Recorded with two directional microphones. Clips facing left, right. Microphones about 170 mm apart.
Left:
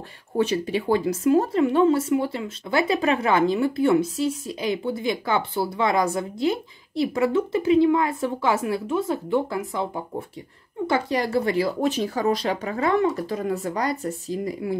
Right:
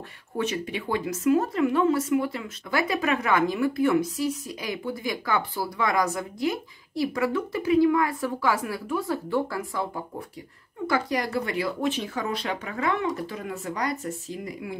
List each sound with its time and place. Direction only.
0.4 s speech: 35° left (ahead or behind)